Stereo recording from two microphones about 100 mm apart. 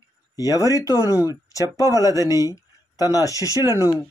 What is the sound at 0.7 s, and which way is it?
Speech, 35° left (ahead or behind).